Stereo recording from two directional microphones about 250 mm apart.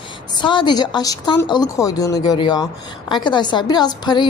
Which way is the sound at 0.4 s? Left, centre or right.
Centre.